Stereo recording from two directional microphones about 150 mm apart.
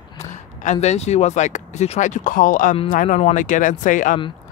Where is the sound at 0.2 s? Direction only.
55° left (ahead or behind).